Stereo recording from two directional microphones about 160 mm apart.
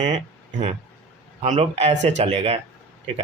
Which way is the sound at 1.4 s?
40° right (ahead or behind).